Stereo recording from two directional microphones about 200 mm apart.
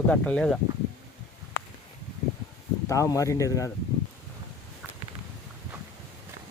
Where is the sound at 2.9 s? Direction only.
15° left (ahead or behind).